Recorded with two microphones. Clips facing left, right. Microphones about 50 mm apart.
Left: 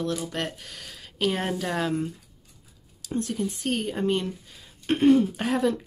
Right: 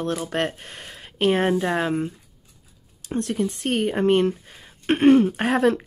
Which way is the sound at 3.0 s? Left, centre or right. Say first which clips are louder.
Right 4 dB; right.